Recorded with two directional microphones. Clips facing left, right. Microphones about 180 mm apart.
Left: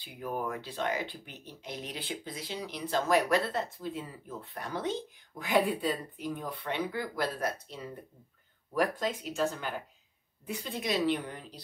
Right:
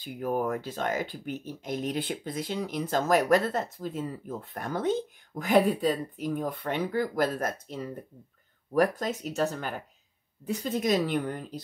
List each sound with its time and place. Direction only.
0.0 s speech: 45° right (ahead or behind)